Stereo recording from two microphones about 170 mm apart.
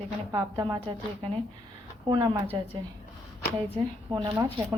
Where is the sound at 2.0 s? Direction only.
25° right (ahead or behind).